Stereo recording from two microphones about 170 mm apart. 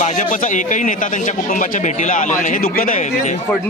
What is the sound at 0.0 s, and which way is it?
A man's voice, 50° left (ahead or behind).